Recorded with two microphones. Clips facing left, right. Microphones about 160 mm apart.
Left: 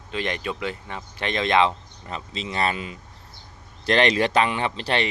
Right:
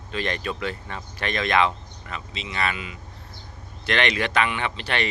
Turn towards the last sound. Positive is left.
turn(degrees=30)  # may be behind; listen again after turning